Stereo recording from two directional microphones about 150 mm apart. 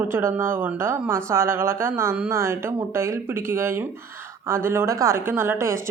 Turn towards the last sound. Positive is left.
turn(degrees=-15)  # may be behind; listen again after turning